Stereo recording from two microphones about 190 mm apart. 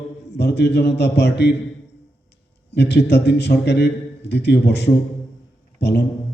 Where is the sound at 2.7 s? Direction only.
60° left (ahead or behind).